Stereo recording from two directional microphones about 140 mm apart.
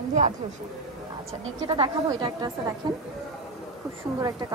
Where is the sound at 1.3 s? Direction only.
40° right (ahead or behind).